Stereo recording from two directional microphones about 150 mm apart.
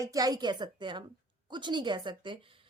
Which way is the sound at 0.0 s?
25° right (ahead or behind).